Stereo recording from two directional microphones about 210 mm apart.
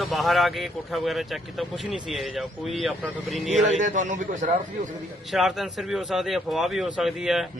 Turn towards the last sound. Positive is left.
turn(degrees=0)  # may be behind; listen again after turning